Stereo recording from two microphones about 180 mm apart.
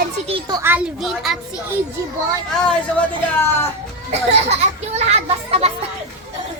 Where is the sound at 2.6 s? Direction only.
10° left (ahead or behind).